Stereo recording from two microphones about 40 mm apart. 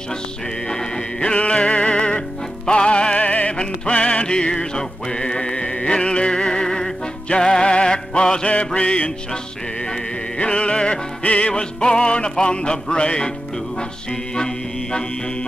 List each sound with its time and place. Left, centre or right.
1.2 s music: left
10.4 s music: left
14.3 s music: left